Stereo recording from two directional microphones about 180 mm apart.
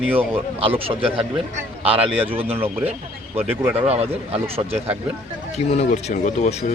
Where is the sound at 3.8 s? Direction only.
35° right (ahead or behind).